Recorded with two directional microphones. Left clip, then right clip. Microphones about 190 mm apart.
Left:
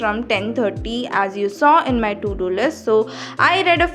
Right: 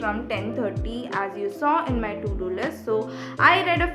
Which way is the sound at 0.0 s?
40° left (ahead or behind).